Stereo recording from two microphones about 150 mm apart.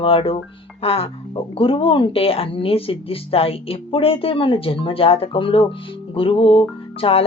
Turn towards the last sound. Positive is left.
turn(degrees=40)  # may be behind; listen again after turning